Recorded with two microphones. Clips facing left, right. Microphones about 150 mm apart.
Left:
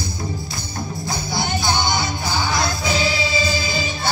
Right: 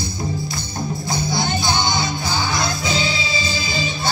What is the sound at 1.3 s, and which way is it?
Music, 20° right (ahead or behind).